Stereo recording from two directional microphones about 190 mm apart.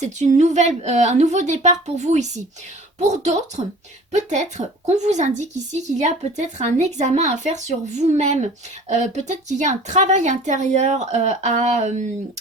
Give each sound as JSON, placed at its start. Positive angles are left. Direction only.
{"t": 0.0, "sound": "speech", "side_deg": -40}